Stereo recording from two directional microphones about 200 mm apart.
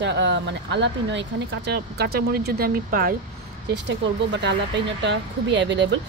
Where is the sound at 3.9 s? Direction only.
60° right (ahead or behind).